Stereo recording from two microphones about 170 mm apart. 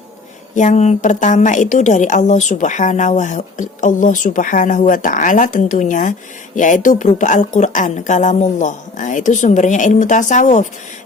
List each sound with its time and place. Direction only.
0.5 s a woman's voice: 45° left (ahead or behind)